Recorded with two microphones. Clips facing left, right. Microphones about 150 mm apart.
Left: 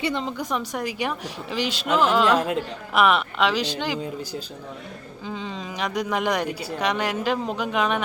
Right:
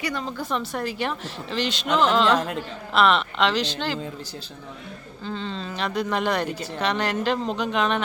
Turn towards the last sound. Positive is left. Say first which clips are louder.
# even
turn(degrees=10)  # may be behind; listen again after turning